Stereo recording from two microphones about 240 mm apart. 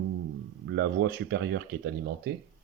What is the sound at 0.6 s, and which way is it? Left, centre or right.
Speech, right.